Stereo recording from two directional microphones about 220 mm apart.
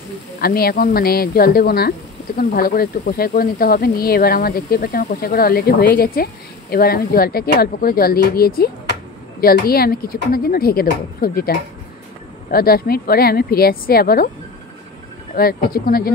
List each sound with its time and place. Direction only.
0.4 s speech: 45° left (ahead or behind)
15.3 s speech: 45° left (ahead or behind)